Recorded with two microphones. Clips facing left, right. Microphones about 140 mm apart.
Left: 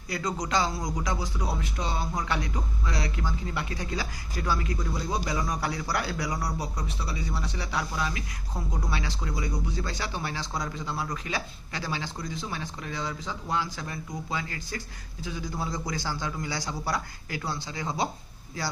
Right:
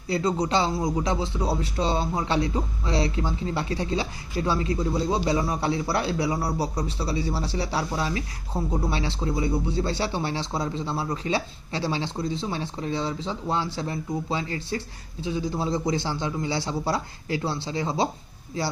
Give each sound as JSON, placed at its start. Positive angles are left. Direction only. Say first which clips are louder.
{"t": 0.1, "sound": "a man's voice", "louder": "right 5 dB", "side_deg": -30}